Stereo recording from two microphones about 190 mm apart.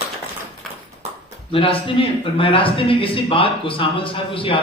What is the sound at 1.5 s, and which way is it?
A man's voice, 30° left (ahead or behind).